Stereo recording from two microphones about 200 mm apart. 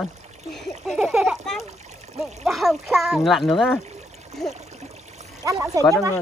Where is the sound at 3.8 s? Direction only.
35° right (ahead or behind).